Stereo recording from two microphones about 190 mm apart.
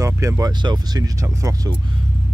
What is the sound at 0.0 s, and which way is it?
Speech, 15° right (ahead or behind).